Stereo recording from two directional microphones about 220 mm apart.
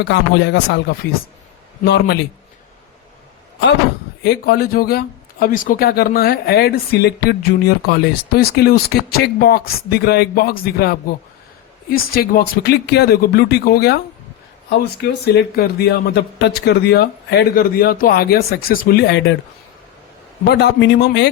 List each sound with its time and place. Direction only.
0.1 s speech: 50° left (ahead or behind)
4.2 s speech: 45° left (ahead or behind)
20.5 s speech: 50° left (ahead or behind)